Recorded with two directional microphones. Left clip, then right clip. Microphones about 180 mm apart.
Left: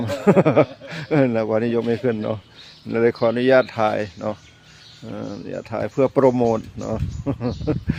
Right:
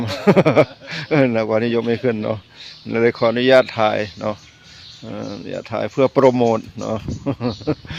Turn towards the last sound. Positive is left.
turn(degrees=-15)  # may be behind; listen again after turning